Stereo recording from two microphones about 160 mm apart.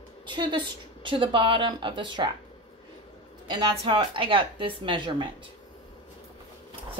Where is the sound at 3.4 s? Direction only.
30° right (ahead or behind).